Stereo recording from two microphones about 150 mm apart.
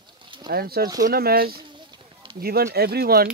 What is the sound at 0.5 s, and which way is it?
Speech, 90° right.